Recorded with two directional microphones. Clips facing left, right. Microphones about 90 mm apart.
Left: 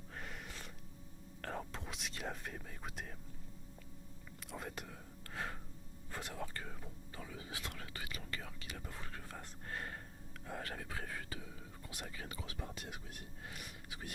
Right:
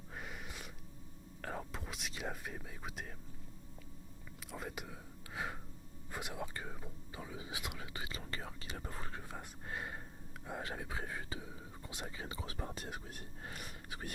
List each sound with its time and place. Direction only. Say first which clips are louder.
0.1 s a sound: right 1 dB; 5° right (ahead or behind)
1.4 s whispering: even; 5° right (ahead or behind)
4.4 s speech: right 1 dB; centre (ahead or behind)
6.1 s whispering: right 2 dB; 15° right (ahead or behind)
8.0 s whispering: right 1 dB; 30° right (ahead or behind)
9.1 s whispering: right 2 dB; 15° right (ahead or behind)
12.5 s whispering: right 3 dB; 40° right (ahead or behind)